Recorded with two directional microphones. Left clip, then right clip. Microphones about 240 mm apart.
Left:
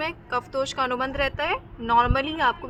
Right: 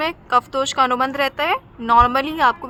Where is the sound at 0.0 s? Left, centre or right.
Right.